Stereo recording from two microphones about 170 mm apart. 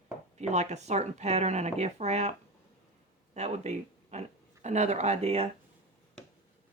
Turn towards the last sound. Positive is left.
turn(degrees=-35)  # may be behind; listen again after turning